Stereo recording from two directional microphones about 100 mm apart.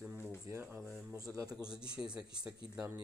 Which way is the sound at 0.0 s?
10° right (ahead or behind).